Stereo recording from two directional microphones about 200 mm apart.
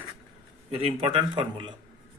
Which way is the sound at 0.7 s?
30° right (ahead or behind).